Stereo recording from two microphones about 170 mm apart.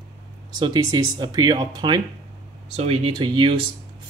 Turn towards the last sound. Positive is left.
turn(degrees=-25)  # may be behind; listen again after turning